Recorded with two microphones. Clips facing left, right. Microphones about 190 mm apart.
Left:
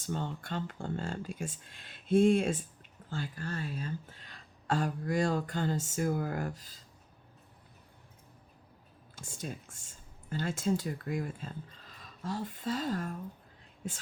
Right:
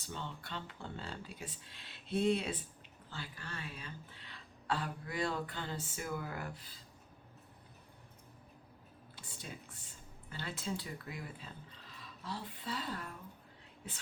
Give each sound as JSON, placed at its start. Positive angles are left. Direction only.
{"t": 0.0, "sound": "speech", "side_deg": 45}
{"t": 9.1, "sound": "speech", "side_deg": 45}